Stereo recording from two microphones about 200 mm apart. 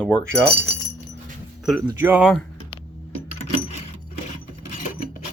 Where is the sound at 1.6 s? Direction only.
Centre (ahead or behind).